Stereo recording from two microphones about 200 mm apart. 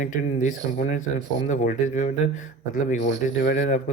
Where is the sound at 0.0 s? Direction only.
40° left (ahead or behind).